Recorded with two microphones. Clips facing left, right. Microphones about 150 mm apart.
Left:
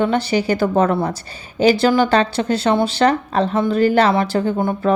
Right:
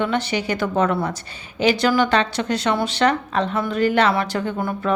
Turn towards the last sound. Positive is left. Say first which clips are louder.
# left 5 dB
turn(degrees=30)  # may be behind; listen again after turning